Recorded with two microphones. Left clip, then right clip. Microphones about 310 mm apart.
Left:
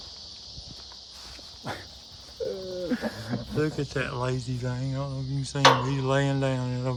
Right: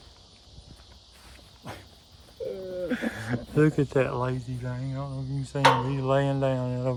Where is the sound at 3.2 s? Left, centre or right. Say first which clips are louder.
Right 6 dB; right.